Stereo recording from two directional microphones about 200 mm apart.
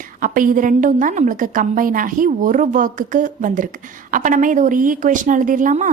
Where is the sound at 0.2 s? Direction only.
45° right (ahead or behind).